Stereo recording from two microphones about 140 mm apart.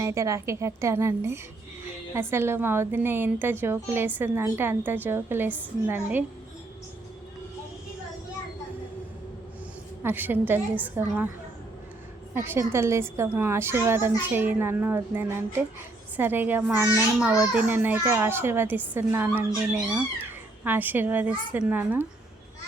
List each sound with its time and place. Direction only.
0.0 s a woman's voice: 20° right (ahead or behind)
10.0 s a woman's voice: 15° right (ahead or behind)
12.3 s a woman's voice: 15° right (ahead or behind)